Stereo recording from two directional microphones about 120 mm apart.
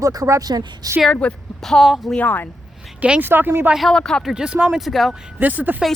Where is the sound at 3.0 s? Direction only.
10° right (ahead or behind).